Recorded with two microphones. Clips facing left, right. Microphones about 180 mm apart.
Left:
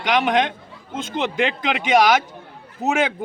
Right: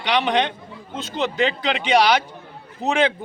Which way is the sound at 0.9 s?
50° left (ahead or behind).